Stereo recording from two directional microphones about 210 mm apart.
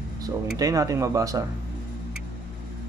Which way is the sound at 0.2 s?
15° right (ahead or behind).